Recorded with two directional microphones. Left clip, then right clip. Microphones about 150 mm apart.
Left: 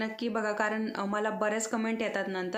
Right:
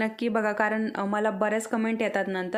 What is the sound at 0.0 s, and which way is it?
A woman's voice, 45° right (ahead or behind).